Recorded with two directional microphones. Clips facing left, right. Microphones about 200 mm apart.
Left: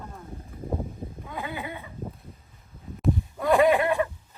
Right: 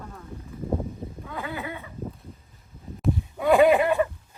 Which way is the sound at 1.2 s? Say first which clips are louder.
Right 1 dB; 20° left (ahead or behind).